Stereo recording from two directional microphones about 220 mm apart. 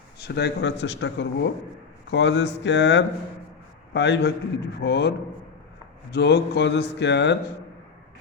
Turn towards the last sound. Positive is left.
turn(degrees=50)  # may be behind; listen again after turning